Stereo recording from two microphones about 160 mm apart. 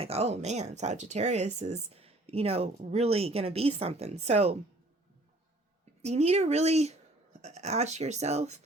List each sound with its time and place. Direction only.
0.0 s speech: 40° right (ahead or behind)
6.0 s speech: 45° right (ahead or behind)